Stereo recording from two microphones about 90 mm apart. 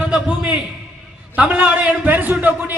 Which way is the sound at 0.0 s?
15° right (ahead or behind).